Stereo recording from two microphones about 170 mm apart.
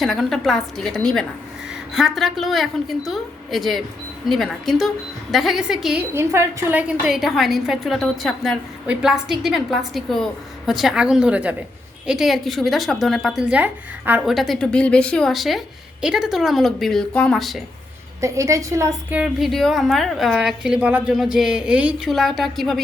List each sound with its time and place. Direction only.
0.0 s a woman's voice: centre (ahead or behind)
18.2 s a woman's voice: 20° right (ahead or behind)
19.2 s a woman's voice: centre (ahead or behind)